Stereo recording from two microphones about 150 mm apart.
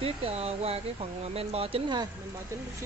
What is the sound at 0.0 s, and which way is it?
Speech, 40° right (ahead or behind).